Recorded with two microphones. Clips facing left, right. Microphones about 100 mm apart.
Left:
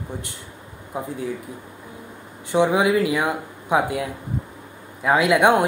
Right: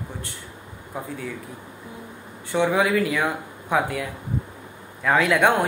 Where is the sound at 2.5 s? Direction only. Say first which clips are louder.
Left 3 dB; 20° left (ahead or behind).